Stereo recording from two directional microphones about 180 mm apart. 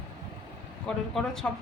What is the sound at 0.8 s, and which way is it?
Speech, 5° left (ahead or behind).